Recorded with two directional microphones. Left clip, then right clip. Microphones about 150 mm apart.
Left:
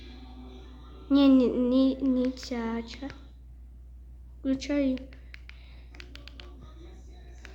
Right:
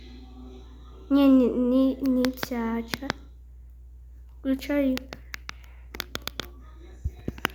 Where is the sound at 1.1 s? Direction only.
Centre (ahead or behind).